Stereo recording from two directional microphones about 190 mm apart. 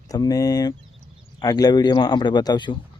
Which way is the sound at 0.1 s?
20° left (ahead or behind).